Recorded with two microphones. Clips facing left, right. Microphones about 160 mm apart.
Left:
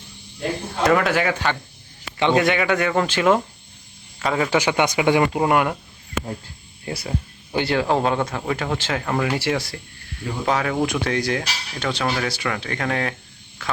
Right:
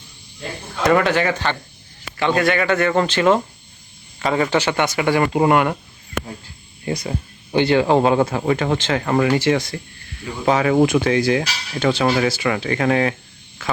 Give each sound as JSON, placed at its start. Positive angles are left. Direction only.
{"t": 0.9, "sound": "speech", "side_deg": 5}
{"t": 2.1, "sound": "a man's voice", "side_deg": 20}
{"t": 4.5, "sound": "speech", "side_deg": 15}
{"t": 5.2, "sound": "speech", "side_deg": 0}
{"t": 6.8, "sound": "speech", "side_deg": 0}